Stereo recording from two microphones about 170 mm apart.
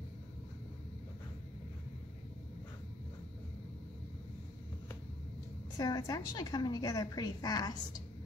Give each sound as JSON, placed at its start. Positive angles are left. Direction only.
{"t": 5.8, "sound": "a woman's voice", "side_deg": 20}